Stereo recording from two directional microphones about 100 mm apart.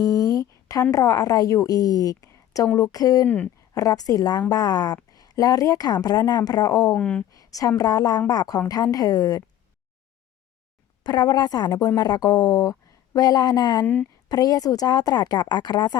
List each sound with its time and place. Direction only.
0.0 s a woman's voice: 40° left (ahead or behind)
3.2 s speech: 15° left (ahead or behind)
3.8 s speech: 35° left (ahead or behind)
6.9 s speech: 10° left (ahead or behind)
7.3 s a woman's voice: 35° left (ahead or behind)
11.0 s a woman's voice: 45° left (ahead or behind)
13.8 s a woman's voice: 20° left (ahead or behind)
14.3 s a woman's voice: 40° left (ahead or behind)